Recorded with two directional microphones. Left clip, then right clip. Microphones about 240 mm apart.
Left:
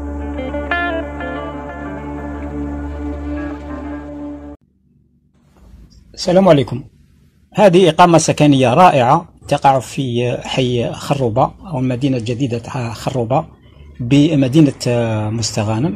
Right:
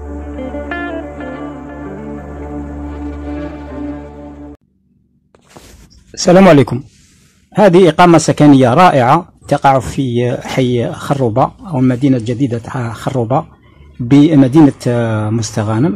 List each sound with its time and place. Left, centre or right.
0.1 s music: centre
6.4 s speech: right